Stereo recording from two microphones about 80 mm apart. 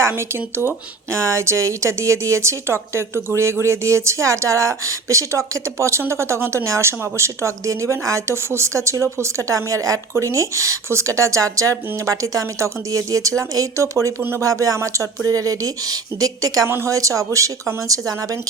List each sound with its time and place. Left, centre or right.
0.0 s a woman's voice: right
14.2 s speech: right
14.4 s speech: right
16.6 s a woman's voice: right
16.9 s speech: right